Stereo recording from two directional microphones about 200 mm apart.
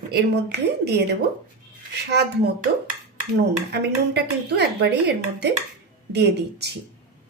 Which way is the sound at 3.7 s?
55° right (ahead or behind).